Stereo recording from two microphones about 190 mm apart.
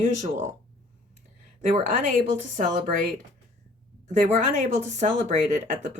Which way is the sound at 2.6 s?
45° right (ahead or behind).